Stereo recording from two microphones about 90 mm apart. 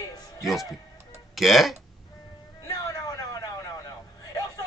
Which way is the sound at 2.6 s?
45° left (ahead or behind).